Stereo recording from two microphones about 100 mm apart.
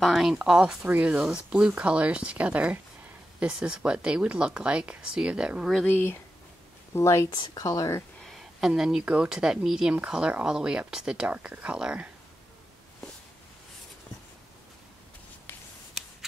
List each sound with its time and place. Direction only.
0.0 s a woman's voice: centre (ahead or behind)
6.9 s speech: 30° left (ahead or behind)
8.2 s a woman's voice: centre (ahead or behind)